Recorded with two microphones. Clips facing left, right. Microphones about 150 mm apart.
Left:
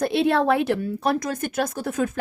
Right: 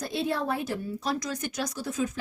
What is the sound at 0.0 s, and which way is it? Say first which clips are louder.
Speech: left 9 dB; 70° left (ahead or behind).